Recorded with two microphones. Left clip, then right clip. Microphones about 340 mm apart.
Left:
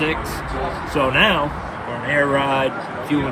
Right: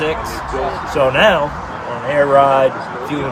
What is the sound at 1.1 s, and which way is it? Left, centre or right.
Speech, centre.